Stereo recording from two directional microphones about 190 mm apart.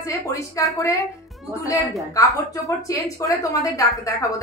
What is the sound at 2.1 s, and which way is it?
A woman's voice, 20° left (ahead or behind).